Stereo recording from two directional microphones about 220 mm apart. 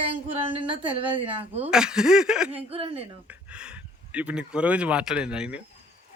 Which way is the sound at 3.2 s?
5° right (ahead or behind).